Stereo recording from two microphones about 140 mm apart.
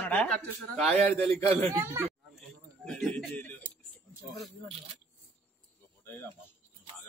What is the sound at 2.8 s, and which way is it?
Speech, 5° left (ahead or behind).